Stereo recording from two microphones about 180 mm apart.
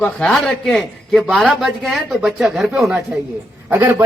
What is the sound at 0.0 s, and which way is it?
A man's voice, 5° left (ahead or behind).